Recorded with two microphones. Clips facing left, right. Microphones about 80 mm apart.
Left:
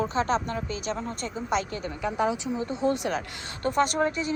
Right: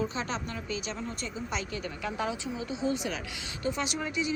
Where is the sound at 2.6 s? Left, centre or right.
Left.